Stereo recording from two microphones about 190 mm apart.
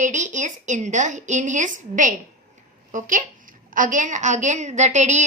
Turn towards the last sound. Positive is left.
turn(degrees=-40)  # may be behind; listen again after turning